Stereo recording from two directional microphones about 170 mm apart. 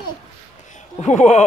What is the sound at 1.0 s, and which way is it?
Speech, 40° left (ahead or behind).